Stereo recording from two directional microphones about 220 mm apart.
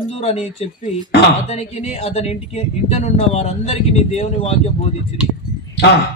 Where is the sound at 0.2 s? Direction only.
30° left (ahead or behind).